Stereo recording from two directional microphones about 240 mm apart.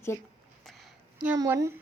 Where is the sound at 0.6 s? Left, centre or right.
Centre.